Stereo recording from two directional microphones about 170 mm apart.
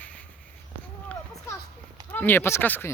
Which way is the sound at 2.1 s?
10° left (ahead or behind).